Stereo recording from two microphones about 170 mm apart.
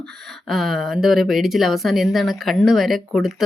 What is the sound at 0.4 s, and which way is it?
Speech, centre (ahead or behind).